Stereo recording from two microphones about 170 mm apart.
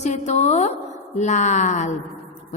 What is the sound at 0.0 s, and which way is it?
A woman's voice, 45° left (ahead or behind).